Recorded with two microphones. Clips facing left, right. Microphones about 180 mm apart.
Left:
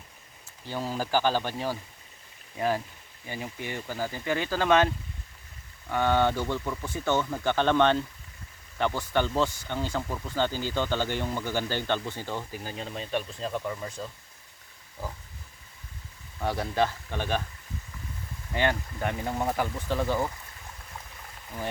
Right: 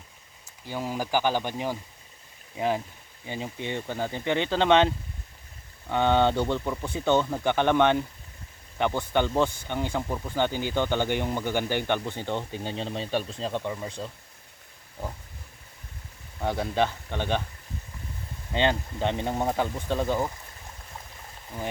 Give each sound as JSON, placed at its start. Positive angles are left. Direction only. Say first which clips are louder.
{"t": 0.6, "sound": "speech", "louder": "right 1 dB", "side_deg": -15}
{"t": 5.9, "sound": "speech", "louder": "right 2 dB", "side_deg": -20}
{"t": 16.4, "sound": "speech", "louder": "right 1 dB", "side_deg": -20}
{"t": 18.5, "sound": "speech", "louder": "right 2 dB", "side_deg": -25}